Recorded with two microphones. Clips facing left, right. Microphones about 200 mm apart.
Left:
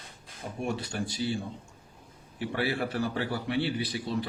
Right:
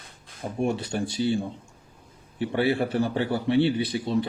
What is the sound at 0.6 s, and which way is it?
A man's voice, 25° right (ahead or behind).